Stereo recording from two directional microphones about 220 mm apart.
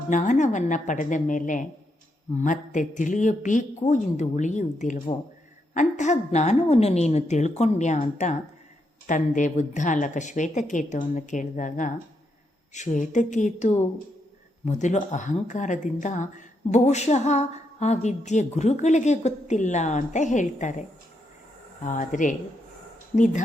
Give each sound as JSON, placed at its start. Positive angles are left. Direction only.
{"t": 0.1, "sound": "speech", "side_deg": 35}
{"t": 21.8, "sound": "speech", "side_deg": 35}